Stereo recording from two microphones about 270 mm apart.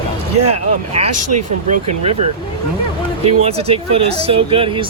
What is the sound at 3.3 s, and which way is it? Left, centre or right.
Speech, right.